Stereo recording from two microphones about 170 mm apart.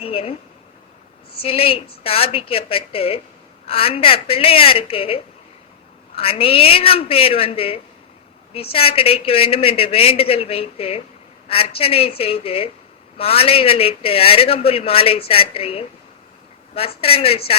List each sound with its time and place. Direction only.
0.0 s speech: 35° left (ahead or behind)
1.4 s speech: 35° left (ahead or behind)
17.0 s speech: 35° left (ahead or behind)